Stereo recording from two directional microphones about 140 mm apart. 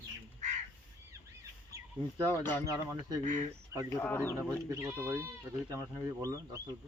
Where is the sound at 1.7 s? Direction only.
25° right (ahead or behind).